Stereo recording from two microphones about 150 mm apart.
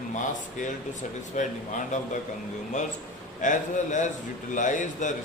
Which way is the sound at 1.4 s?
55° left (ahead or behind).